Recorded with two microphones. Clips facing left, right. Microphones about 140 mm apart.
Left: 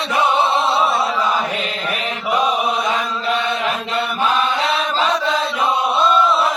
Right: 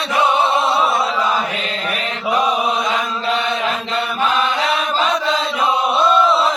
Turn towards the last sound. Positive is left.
turn(degrees=-20)  # may be behind; listen again after turning